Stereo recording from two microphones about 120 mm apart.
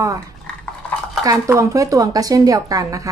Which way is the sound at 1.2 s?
25° right (ahead or behind).